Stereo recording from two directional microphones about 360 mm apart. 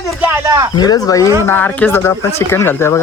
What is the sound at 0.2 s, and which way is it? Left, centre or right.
Speech, centre.